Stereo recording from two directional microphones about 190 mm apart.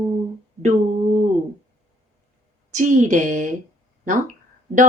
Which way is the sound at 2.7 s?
40° right (ahead or behind).